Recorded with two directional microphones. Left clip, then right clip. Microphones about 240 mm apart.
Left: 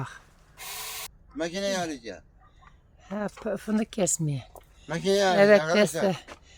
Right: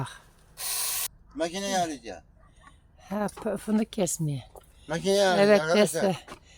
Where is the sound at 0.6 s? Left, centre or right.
Right.